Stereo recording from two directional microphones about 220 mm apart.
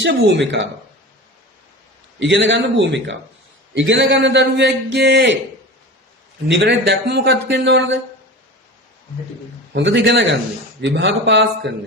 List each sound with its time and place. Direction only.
0.0 s a man's voice: 50° right (ahead or behind)
2.1 s a man's voice: 55° right (ahead or behind)
6.6 s a man's voice: 50° right (ahead or behind)
9.7 s a man's voice: 55° right (ahead or behind)